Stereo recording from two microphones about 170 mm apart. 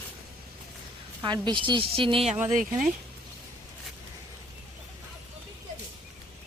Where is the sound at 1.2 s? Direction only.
25° right (ahead or behind).